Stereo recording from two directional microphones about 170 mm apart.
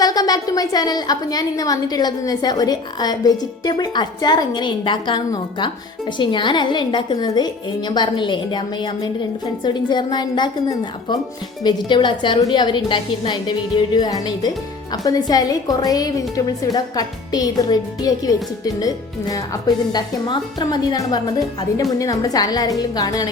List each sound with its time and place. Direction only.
0.0 s a woman's voice: 20° left (ahead or behind)